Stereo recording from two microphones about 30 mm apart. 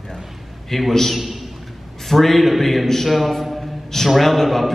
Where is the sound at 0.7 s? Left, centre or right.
Centre.